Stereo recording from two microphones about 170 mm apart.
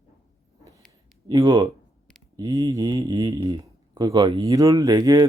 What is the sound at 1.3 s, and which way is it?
Speech, 25° right (ahead or behind).